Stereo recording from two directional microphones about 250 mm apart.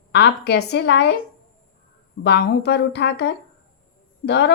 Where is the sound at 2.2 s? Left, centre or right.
Left.